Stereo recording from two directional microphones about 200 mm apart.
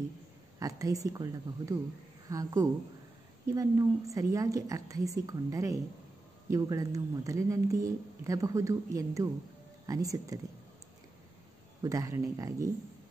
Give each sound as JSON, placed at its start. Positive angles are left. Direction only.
{"t": 0.6, "sound": "speech", "side_deg": -15}
{"t": 11.8, "sound": "speech", "side_deg": -15}